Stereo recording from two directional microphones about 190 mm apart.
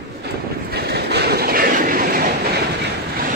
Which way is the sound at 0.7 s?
60° right (ahead or behind).